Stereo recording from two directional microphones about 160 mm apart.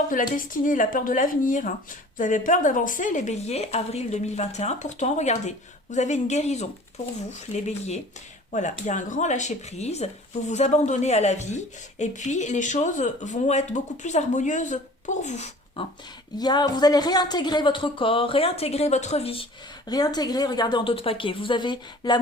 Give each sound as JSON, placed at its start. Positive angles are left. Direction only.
{"t": 0.1, "sound": "a woman's voice", "side_deg": 55}
{"t": 16.4, "sound": "speech", "side_deg": 25}
{"t": 19.9, "sound": "a woman's voice", "side_deg": 25}